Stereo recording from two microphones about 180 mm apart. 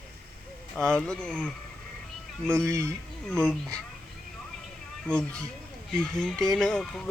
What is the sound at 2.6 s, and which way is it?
Speech, 15° right (ahead or behind).